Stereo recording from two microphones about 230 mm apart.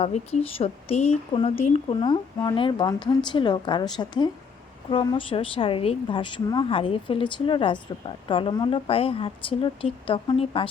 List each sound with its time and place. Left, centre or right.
0.0 s speech: left